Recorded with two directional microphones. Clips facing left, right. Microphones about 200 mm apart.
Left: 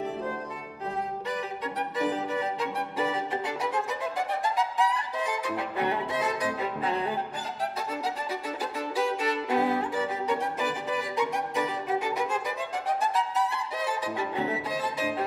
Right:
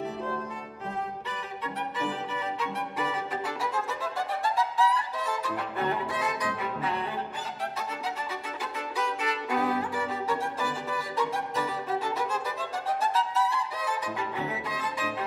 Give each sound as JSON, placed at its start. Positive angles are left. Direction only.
{"t": 2.0, "sound": "violin", "side_deg": 40}
{"t": 8.3, "sound": "violin", "side_deg": 35}